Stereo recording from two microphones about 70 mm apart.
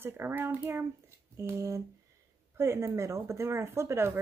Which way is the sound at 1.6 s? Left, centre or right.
Right.